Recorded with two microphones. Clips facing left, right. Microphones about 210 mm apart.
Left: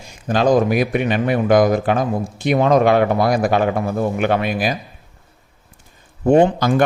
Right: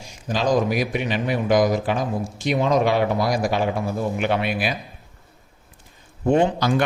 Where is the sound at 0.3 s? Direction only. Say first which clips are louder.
Left 5 dB; 55° left (ahead or behind).